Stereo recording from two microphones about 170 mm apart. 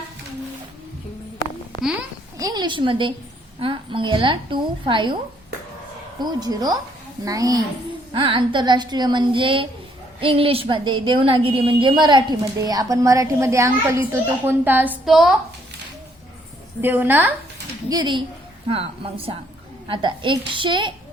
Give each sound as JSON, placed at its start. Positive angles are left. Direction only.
{"t": 2.4, "sound": "a woman's voice", "side_deg": -25}
{"t": 6.1, "sound": "a woman's voice", "side_deg": -25}
{"t": 16.8, "sound": "a woman's voice", "side_deg": -10}
{"t": 17.8, "sound": "a woman's voice", "side_deg": -25}